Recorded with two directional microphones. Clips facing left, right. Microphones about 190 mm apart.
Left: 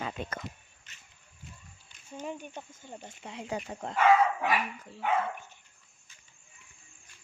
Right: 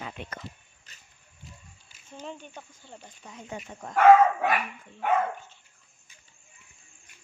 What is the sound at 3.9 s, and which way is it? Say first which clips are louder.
Speech: right 6 dB; 55° right (ahead or behind).